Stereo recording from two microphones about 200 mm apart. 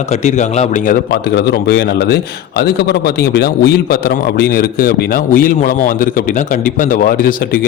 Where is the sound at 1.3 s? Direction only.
55° left (ahead or behind).